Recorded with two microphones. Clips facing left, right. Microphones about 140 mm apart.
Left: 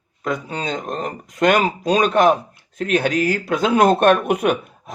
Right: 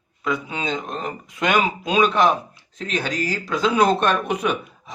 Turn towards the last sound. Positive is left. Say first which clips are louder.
# left 4 dB
turn(degrees=50)  # may be behind; listen again after turning